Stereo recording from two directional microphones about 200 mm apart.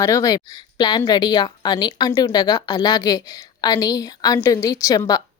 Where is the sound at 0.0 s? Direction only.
15° left (ahead or behind).